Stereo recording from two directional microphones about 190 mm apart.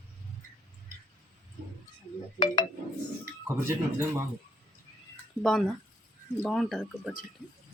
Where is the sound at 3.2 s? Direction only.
15° right (ahead or behind).